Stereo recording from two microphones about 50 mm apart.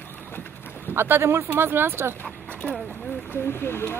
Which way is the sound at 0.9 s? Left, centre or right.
Right.